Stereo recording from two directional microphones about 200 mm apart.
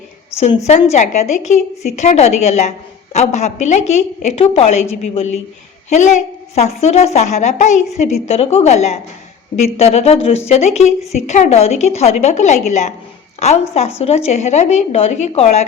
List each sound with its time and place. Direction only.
0.3 s a woman's voice: 30° left (ahead or behind)